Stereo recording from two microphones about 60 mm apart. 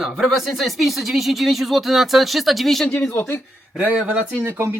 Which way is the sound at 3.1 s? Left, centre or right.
Left.